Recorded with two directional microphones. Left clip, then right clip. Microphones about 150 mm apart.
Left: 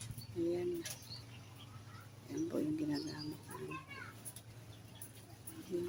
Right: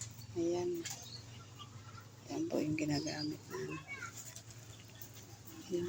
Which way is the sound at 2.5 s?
5° right (ahead or behind).